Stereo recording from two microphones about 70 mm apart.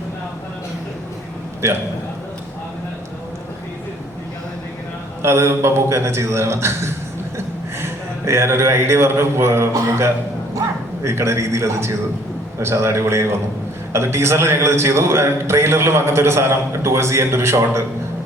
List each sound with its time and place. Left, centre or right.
1.6 s a man's voice: right
5.2 s a man's voice: right